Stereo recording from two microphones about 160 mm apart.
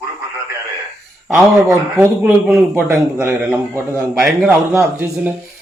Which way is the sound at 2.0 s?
15° right (ahead or behind).